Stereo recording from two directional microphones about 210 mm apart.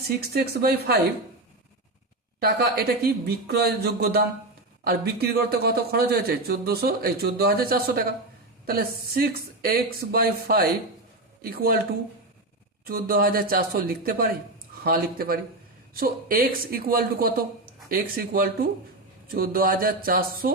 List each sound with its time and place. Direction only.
0.2 s a man's voice: 50° right (ahead or behind)
2.4 s a man's voice: 50° right (ahead or behind)
12.8 s a man's voice: 45° right (ahead or behind)